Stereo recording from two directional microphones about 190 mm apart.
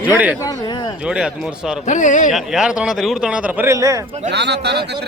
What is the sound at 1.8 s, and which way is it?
Speech, 40° left (ahead or behind).